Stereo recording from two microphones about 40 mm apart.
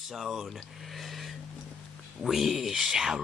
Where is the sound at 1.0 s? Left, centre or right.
Centre.